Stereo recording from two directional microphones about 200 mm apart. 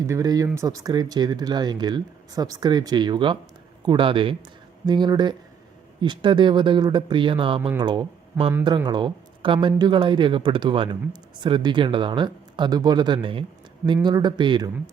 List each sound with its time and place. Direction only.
0.0 s speech: 15° right (ahead or behind)